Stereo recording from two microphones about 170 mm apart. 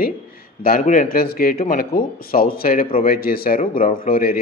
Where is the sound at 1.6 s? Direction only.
50° left (ahead or behind).